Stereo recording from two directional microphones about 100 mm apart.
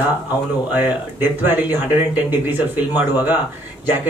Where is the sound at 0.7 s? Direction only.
20° right (ahead or behind).